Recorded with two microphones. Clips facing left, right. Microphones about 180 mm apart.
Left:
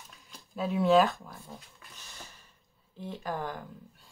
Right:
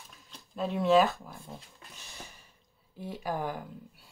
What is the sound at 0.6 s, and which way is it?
Speech, centre (ahead or behind).